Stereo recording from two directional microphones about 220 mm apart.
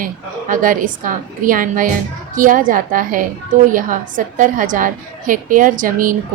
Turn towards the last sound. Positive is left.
turn(degrees=-40)  # may be behind; listen again after turning